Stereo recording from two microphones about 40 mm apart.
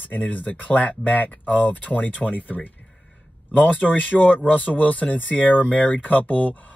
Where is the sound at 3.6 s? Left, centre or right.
Left.